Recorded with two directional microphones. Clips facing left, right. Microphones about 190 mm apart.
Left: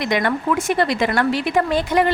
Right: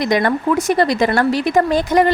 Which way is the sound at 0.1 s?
40° right (ahead or behind).